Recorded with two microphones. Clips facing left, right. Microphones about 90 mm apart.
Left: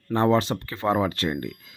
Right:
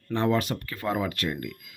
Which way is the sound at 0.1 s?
35° left (ahead or behind).